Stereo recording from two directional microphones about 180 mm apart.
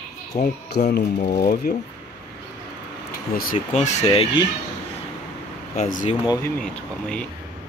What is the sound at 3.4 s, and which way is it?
Speech, 45° left (ahead or behind).